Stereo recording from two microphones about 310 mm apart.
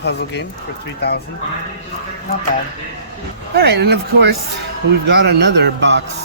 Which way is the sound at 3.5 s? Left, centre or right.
Right.